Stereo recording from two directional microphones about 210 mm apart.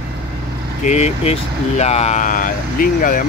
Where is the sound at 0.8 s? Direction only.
30° left (ahead or behind).